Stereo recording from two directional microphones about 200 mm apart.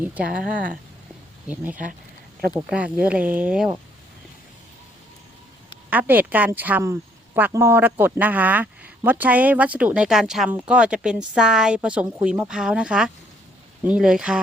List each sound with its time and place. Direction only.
0.0 s speech: 10° right (ahead or behind)
0.3 s speech: 45° right (ahead or behind)
2.5 s speech: 5° right (ahead or behind)
5.9 s speech: 10° right (ahead or behind)